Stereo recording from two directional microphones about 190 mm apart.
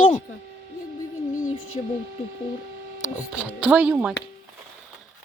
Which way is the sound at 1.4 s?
35° left (ahead or behind).